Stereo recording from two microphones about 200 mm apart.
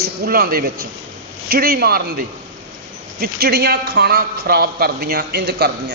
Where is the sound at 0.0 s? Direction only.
50° right (ahead or behind).